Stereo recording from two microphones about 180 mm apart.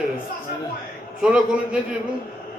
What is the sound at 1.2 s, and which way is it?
Speech, 5° right (ahead or behind).